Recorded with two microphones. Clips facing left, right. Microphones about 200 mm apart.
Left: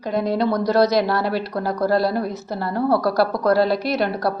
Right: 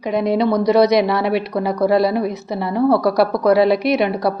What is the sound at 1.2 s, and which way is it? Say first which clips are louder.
Speech: right 4 dB; 70° right (ahead or behind).